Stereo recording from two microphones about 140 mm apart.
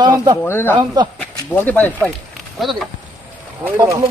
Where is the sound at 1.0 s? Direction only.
30° right (ahead or behind).